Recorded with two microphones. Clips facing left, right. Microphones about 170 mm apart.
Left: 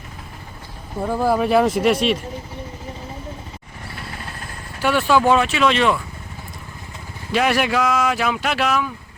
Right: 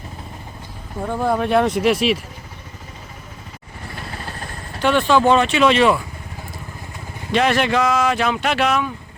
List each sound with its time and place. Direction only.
1.0 s speech: 5° left (ahead or behind)
4.8 s speech: 10° left (ahead or behind)
7.3 s speech: 10° left (ahead or behind)